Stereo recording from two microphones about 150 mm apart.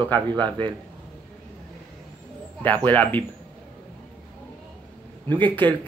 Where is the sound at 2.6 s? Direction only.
10° left (ahead or behind).